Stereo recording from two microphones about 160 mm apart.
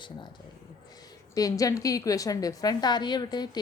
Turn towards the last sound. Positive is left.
turn(degrees=25)  # may be behind; listen again after turning